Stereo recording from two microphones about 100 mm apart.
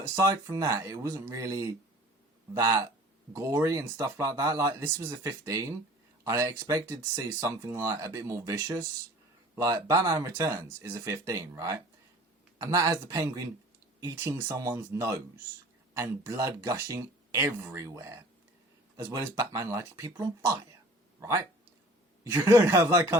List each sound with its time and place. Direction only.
0.2 s speech: 30° right (ahead or behind)